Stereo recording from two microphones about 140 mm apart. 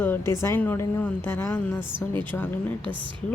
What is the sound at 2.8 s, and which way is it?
Speech, 35° right (ahead or behind).